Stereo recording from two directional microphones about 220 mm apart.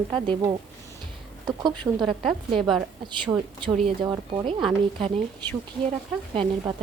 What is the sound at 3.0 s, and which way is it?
Speech, 20° right (ahead or behind).